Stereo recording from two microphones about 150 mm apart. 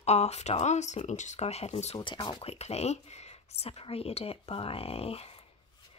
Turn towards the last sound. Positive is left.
turn(degrees=40)  # may be behind; listen again after turning